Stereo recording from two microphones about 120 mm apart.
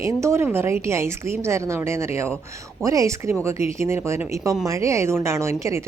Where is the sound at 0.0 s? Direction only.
25° right (ahead or behind).